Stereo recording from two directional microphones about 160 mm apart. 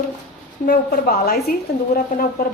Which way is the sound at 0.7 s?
75° left (ahead or behind).